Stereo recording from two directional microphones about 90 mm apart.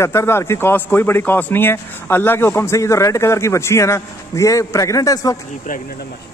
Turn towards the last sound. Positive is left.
turn(degrees=40)  # may be behind; listen again after turning